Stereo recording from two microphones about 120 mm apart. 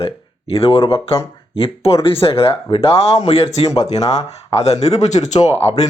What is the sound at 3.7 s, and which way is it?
Speech, 30° left (ahead or behind).